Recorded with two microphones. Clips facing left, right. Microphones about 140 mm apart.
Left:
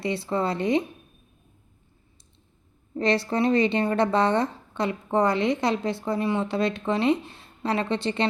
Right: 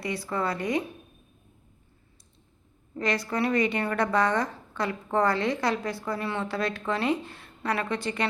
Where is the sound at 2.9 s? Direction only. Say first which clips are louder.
Left 4 dB; 30° left (ahead or behind).